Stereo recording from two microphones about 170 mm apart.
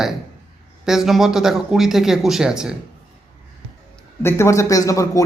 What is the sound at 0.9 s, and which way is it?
A man's voice, centre (ahead or behind).